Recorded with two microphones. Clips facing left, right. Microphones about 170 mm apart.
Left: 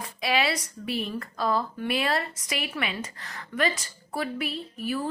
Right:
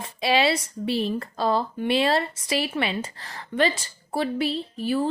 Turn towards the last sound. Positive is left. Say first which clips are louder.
# right 5 dB
turn(degrees=-30)  # may be behind; listen again after turning